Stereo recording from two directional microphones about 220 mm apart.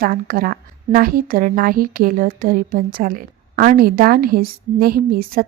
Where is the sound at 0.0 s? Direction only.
40° right (ahead or behind).